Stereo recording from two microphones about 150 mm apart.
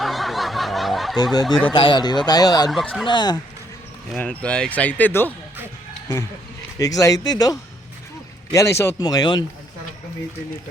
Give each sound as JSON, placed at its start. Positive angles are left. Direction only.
{"t": 0.0, "sound": "snicker", "side_deg": 0}
{"t": 1.2, "sound": "speech", "side_deg": 25}
{"t": 2.6, "sound": "speech", "side_deg": 0}
{"t": 3.1, "sound": "speech", "side_deg": 30}
{"t": 4.1, "sound": "speech", "side_deg": 5}
{"t": 6.7, "sound": "speech", "side_deg": 25}
{"t": 8.5, "sound": "speech", "side_deg": 20}